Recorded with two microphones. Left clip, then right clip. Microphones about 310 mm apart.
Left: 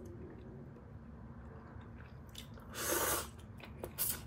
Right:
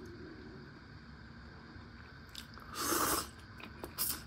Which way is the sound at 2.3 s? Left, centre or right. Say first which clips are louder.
Right 3 dB; right.